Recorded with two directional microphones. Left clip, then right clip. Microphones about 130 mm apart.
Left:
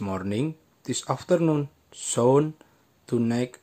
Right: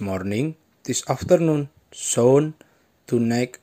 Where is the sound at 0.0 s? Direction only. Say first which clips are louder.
Right 3 dB; 10° right (ahead or behind).